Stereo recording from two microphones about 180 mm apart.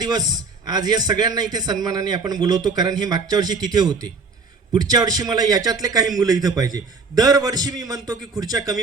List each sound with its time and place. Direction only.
0.0 s a man's voice: 20° right (ahead or behind)